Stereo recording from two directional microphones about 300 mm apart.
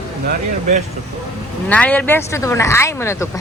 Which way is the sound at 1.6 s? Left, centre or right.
Centre.